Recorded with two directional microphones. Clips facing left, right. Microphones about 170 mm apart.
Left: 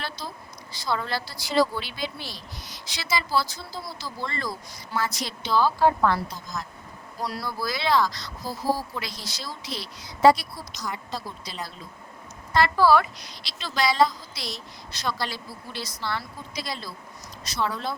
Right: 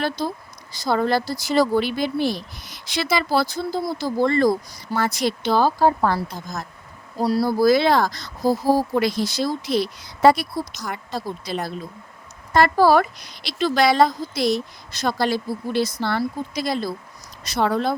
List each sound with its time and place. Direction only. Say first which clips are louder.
0.7 s speech: right 8 dB; 45° right (ahead or behind)
6.3 s speech: right 3 dB; 50° right (ahead or behind)
7.2 s speech: right 12 dB; 35° right (ahead or behind); by 11.7 s 55° right (ahead or behind)
12.5 s speech: right 4 dB; 45° right (ahead or behind)